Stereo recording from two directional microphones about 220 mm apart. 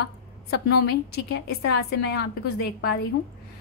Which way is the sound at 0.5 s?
45° left (ahead or behind).